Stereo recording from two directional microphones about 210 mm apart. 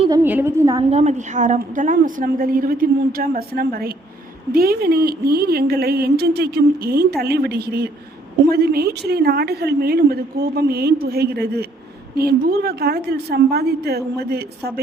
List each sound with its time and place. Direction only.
0.2 s a woman's voice: 10° right (ahead or behind)
0.9 s a woman's voice: 30° right (ahead or behind); by 14.7 s 50° right (ahead or behind)